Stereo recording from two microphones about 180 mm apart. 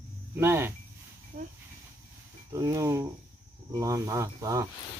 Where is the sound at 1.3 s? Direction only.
45° right (ahead or behind).